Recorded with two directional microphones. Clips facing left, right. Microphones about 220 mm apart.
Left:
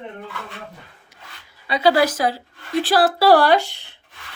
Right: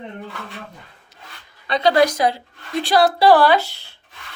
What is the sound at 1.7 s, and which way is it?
A woman's voice, 5° left (ahead or behind).